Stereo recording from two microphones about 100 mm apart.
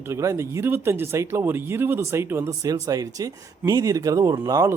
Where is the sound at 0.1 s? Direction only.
30° right (ahead or behind).